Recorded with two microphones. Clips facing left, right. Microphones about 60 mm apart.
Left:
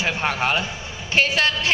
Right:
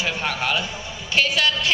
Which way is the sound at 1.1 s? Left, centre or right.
Left.